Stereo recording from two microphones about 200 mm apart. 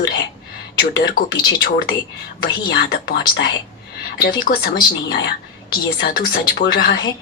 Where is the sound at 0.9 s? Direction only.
50° left (ahead or behind).